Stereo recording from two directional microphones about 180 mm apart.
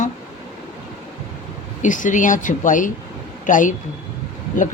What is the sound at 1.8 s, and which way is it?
Speech, 45° left (ahead or behind).